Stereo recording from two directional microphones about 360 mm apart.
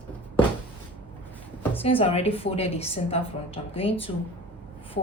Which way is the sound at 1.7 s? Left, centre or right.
Centre.